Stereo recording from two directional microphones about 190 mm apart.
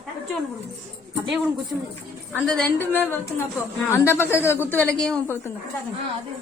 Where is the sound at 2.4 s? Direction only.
5° left (ahead or behind).